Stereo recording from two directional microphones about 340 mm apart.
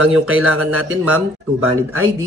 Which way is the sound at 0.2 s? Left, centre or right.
Right.